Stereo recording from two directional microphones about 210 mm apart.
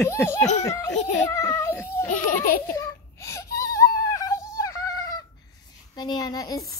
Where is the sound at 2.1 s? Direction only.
40° left (ahead or behind).